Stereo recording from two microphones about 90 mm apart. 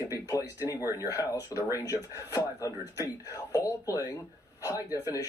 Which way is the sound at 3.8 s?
40° left (ahead or behind).